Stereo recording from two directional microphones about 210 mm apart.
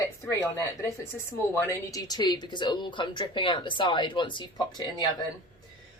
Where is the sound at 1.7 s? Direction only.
15° left (ahead or behind).